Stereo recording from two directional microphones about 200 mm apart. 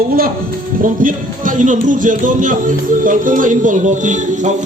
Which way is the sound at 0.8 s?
40° right (ahead or behind).